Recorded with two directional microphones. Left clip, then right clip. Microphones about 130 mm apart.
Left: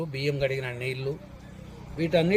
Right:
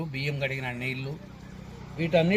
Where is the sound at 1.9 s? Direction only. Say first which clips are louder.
Even; 30° left (ahead or behind).